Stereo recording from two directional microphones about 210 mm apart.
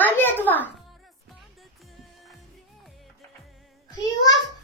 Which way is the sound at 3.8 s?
15° left (ahead or behind).